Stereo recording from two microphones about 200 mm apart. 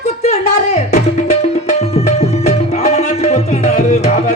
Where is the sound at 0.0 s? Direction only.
30° left (ahead or behind).